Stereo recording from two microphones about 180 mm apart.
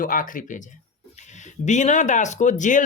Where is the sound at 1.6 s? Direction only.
40° left (ahead or behind).